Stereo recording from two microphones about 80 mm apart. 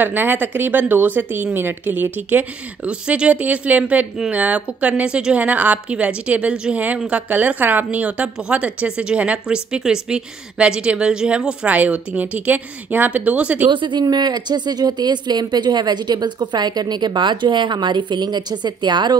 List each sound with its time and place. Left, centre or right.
0.0 s speech: right
13.7 s speech: right
14.0 s speech: right